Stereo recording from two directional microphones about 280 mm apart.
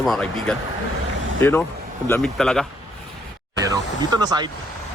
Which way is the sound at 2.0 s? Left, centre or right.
Centre.